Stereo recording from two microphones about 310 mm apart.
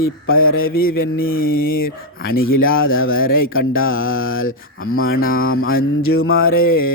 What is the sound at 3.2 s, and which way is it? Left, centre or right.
Speech, left.